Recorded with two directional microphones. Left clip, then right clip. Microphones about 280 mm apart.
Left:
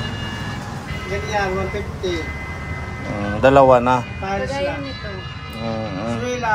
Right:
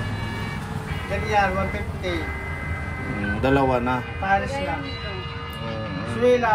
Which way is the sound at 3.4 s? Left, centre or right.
Centre.